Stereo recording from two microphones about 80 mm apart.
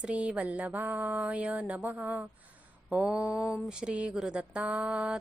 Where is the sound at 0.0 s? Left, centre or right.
Centre.